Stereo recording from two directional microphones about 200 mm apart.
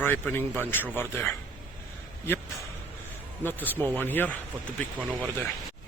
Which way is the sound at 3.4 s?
10° left (ahead or behind).